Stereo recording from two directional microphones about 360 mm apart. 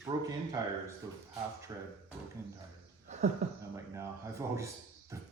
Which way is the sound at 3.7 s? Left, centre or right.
Centre.